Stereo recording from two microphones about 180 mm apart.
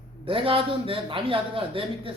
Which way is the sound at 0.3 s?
30° right (ahead or behind).